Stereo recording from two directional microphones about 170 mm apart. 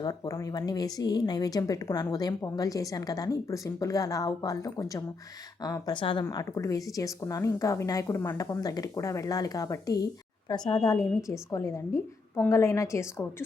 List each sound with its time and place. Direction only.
0.0 s a woman's voice: 20° left (ahead or behind)
6.2 s a woman's voice: 20° left (ahead or behind)